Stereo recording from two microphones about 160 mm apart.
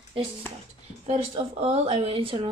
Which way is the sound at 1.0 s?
40° right (ahead or behind).